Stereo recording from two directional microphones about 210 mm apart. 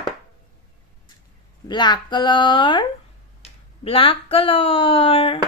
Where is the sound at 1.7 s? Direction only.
20° left (ahead or behind).